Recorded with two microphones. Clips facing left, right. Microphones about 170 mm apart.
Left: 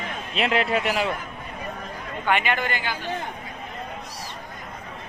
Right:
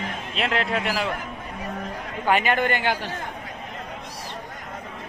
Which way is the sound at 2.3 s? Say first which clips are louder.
Right 3 dB; 40° right (ahead or behind).